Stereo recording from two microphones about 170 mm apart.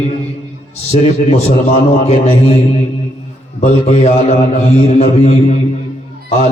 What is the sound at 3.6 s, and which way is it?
A man's voice, 40° left (ahead or behind).